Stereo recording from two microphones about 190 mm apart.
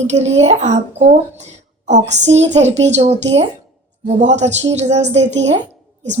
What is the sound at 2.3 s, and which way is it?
A woman's voice, 35° right (ahead or behind).